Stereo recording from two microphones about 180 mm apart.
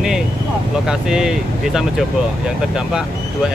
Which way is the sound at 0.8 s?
5° right (ahead or behind).